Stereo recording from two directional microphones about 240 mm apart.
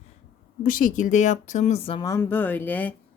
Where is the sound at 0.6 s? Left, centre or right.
Left; by 2.9 s centre.